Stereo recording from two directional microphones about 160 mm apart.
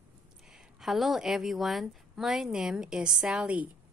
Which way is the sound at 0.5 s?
Centre (ahead or behind).